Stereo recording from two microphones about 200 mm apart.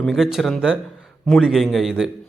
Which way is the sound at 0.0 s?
Centre (ahead or behind).